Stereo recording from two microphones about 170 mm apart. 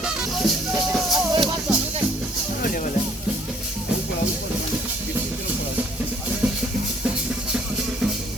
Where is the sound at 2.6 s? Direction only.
55° left (ahead or behind).